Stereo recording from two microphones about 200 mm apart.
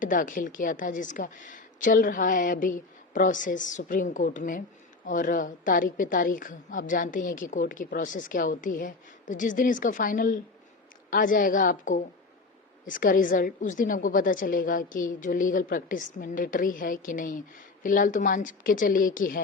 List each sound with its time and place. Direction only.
0.0 s a woman's voice: 40° left (ahead or behind)